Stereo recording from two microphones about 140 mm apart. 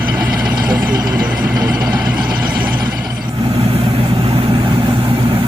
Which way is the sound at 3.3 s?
35° right (ahead or behind).